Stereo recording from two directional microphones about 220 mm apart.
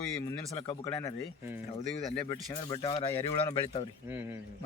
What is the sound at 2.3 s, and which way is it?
Speech, 20° left (ahead or behind).